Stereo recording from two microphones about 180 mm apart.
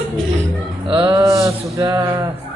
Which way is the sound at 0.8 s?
25° right (ahead or behind).